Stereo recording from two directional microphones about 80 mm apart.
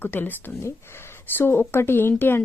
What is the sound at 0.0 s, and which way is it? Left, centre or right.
Speech, left.